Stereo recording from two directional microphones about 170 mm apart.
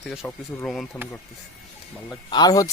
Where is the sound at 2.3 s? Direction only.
20° left (ahead or behind).